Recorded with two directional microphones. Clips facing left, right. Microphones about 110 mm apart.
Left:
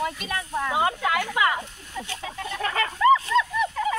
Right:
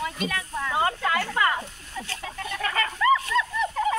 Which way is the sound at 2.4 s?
25° left (ahead or behind).